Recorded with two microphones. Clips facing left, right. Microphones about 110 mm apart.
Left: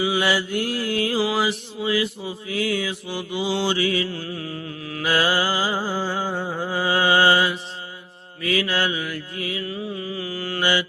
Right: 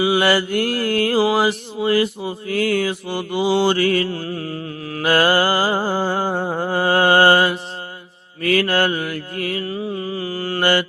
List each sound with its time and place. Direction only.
0.0 s mantra: 65° right (ahead or behind); by 4.5 s 45° right (ahead or behind)
4.9 s mantra: 55° right (ahead or behind); by 10.6 s 35° right (ahead or behind)
10.6 s mantra: 55° right (ahead or behind)